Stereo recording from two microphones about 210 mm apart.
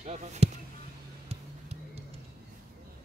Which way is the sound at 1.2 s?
30° right (ahead or behind).